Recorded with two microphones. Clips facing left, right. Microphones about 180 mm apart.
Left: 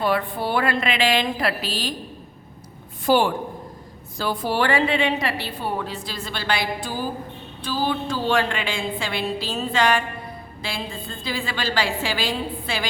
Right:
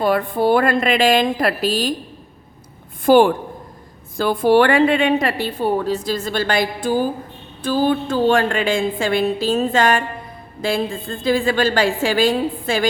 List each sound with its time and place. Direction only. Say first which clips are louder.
0.0 s a woman's voice: right 6 dB; 45° right (ahead or behind)
3.1 s a woman's voice: right 7 dB; 50° right (ahead or behind)